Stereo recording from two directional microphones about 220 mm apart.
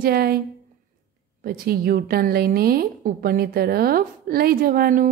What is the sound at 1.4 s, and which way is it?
A woman's voice, 45° right (ahead or behind).